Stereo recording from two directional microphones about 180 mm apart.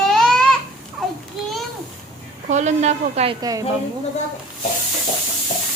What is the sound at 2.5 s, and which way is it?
Speech, 40° right (ahead or behind).